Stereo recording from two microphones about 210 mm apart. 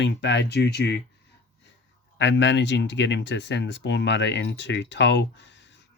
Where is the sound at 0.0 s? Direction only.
55° left (ahead or behind).